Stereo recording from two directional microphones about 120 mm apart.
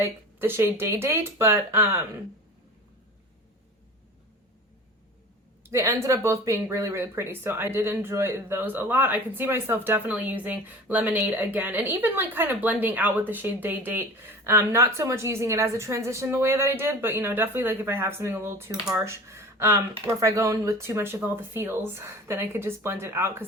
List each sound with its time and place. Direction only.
0.0 s speech: 20° right (ahead or behind)
5.7 s speech: 25° right (ahead or behind)